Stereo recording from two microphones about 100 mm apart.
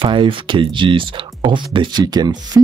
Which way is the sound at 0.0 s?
55° right (ahead or behind).